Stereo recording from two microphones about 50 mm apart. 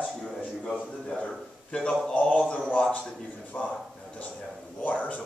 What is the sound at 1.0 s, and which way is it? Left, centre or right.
A man's voice, left.